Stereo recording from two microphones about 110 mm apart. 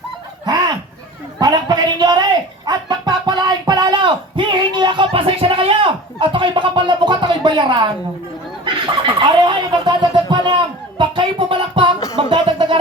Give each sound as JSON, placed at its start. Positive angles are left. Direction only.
{"t": 0.4, "sound": "fowl", "side_deg": -40}
{"t": 1.4, "sound": "a woman's voice", "side_deg": -35}
{"t": 2.6, "sound": "a sound", "side_deg": -40}